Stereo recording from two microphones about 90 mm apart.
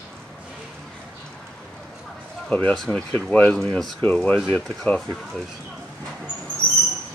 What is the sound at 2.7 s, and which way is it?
Speech, 5° left (ahead or behind).